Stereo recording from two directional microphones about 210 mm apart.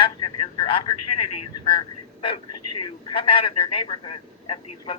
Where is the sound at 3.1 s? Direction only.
25° left (ahead or behind).